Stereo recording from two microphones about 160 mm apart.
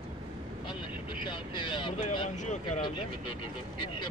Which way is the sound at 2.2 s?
50° left (ahead or behind).